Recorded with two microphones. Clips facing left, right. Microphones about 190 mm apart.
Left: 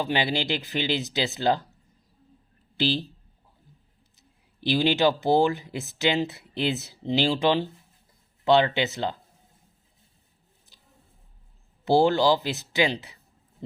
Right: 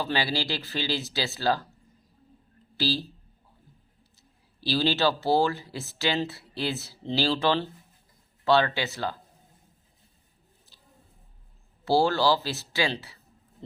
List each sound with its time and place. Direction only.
0.0 s speech: 20° left (ahead or behind)
2.7 s speech: 20° left (ahead or behind)
4.2 s speech: 20° left (ahead or behind)
10.7 s a sound: 15° left (ahead or behind)
11.9 s speech: 20° left (ahead or behind)